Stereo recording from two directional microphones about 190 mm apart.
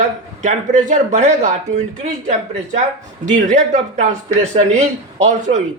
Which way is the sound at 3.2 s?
40° right (ahead or behind).